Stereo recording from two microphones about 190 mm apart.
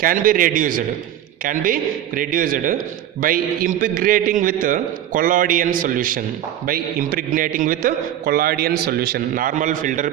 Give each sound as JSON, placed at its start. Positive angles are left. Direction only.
{"t": 0.0, "sound": "a man's voice", "side_deg": -45}